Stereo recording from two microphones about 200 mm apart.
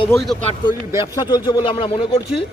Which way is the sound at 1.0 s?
20° left (ahead or behind).